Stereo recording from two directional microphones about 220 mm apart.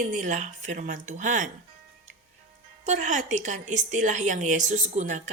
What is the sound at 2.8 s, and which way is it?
A woman's voice, 35° right (ahead or behind).